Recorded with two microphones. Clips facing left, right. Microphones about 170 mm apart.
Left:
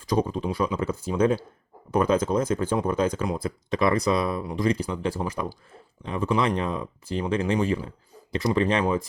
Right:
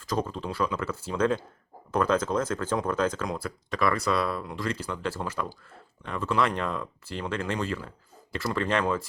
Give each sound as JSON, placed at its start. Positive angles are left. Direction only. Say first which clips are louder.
{"t": 0.0, "sound": "speech", "louder": "left 5 dB", "side_deg": 15}